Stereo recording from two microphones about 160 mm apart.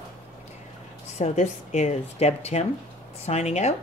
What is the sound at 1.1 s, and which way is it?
Speech, 45° left (ahead or behind).